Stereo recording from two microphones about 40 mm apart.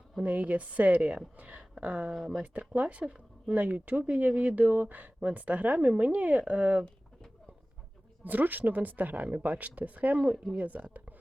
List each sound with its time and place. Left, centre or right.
0.3 s speech: right
1.4 s a sound: right
1.8 s speech: right
2.1 s speech: centre
2.4 s speech: right
3.0 s speech: right
3.5 s speech: right
8.2 s speech: right